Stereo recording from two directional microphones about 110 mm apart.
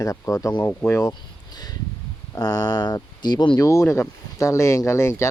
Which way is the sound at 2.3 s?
35° left (ahead or behind).